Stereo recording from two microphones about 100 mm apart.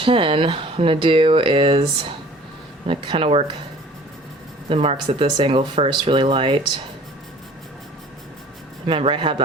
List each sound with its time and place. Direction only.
0.0 s speech: 60° right (ahead or behind)
4.7 s speech: 70° right (ahead or behind)
8.9 s speech: 60° right (ahead or behind)